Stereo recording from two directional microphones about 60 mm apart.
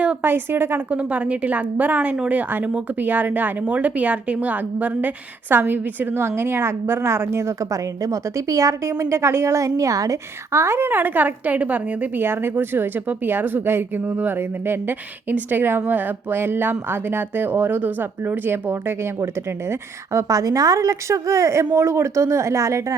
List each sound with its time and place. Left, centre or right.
0.2 s a woman's voice: right
0.9 s a woman's voice: right
14.0 s a woman's voice: right
20.1 s speech: right